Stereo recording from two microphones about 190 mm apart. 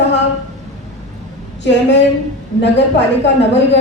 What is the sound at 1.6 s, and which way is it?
A woman's voice, 65° left (ahead or behind).